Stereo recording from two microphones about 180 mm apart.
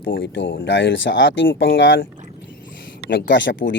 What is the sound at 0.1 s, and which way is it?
Speech, 90° left.